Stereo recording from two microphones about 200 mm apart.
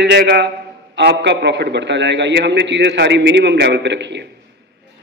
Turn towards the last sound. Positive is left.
turn(degrees=-60)  # may be behind; listen again after turning